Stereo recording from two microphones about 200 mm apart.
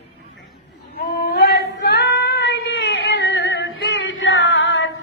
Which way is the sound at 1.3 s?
55° left (ahead or behind).